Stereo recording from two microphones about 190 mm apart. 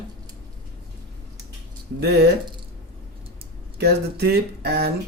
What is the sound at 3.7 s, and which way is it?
Speech, 55° right (ahead or behind).